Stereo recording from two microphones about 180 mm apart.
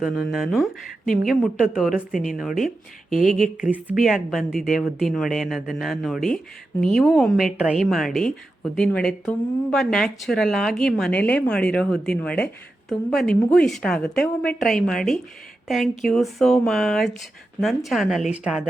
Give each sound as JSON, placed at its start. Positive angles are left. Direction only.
{"t": 0.0, "sound": "a woman's voice", "side_deg": -5}
{"t": 3.1, "sound": "speech", "side_deg": 45}
{"t": 3.6, "sound": "a woman's voice", "side_deg": -5}